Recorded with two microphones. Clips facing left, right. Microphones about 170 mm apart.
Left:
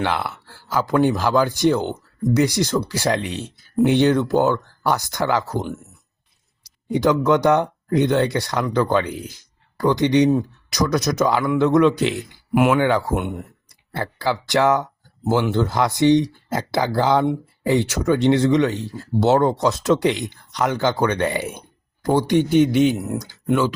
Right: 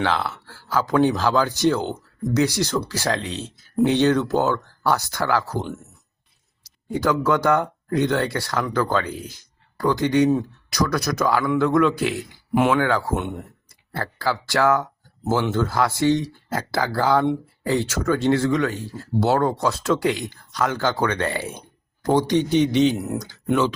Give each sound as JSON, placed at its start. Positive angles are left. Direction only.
{"t": 0.0, "sound": "speech", "side_deg": 10}
{"t": 6.9, "sound": "speech", "side_deg": 20}